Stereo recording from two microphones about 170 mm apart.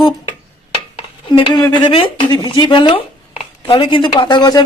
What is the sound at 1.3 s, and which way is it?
Speech, 30° left (ahead or behind).